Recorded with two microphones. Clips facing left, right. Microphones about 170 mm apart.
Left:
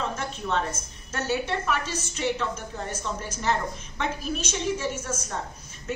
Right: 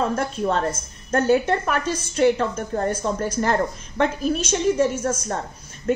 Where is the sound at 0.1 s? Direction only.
50° right (ahead or behind).